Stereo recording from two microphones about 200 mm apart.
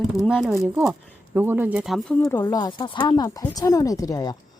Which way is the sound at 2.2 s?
15° left (ahead or behind).